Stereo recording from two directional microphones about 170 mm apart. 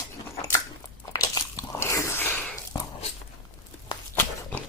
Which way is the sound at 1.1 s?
20° left (ahead or behind).